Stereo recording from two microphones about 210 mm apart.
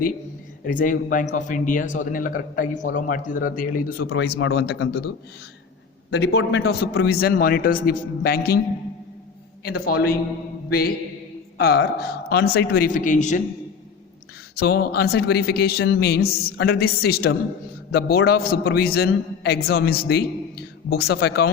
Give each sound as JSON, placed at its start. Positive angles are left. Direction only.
{"t": 0.6, "sound": "a man's voice", "side_deg": 40}
{"t": 4.1, "sound": "speech", "side_deg": 55}
{"t": 9.6, "sound": "speech", "side_deg": 50}
{"t": 11.5, "sound": "speech", "side_deg": 50}
{"t": 14.5, "sound": "speech", "side_deg": 50}